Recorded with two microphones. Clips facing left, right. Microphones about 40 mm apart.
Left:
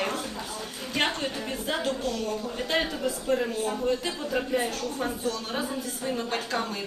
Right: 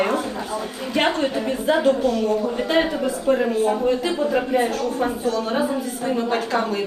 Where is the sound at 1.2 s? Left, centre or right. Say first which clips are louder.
Right 10 dB; centre.